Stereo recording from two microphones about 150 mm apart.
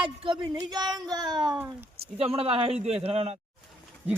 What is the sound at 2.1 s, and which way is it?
Speech, 40° right (ahead or behind).